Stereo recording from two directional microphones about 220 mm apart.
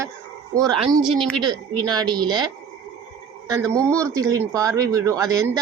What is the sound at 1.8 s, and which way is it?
Speech, 20° right (ahead or behind).